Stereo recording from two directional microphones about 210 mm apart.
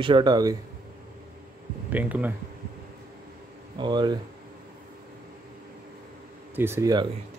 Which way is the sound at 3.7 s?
20° right (ahead or behind).